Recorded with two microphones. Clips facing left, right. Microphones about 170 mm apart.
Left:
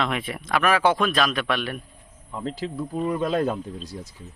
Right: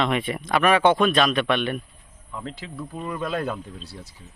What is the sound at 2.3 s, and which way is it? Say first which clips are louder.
Speech: left 5 dB; 35° left (ahead or behind).